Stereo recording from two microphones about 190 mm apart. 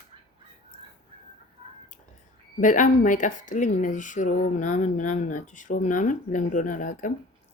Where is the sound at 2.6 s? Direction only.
45° left (ahead or behind).